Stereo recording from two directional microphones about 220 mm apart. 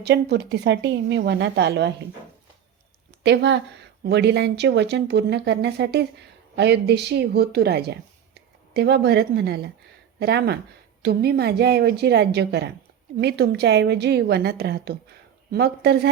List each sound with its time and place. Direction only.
0.0 s speech: 50° right (ahead or behind)
3.2 s speech: 50° right (ahead or behind)